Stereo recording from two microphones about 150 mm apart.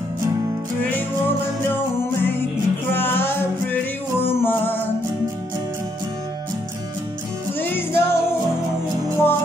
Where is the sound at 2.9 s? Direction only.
15° left (ahead or behind).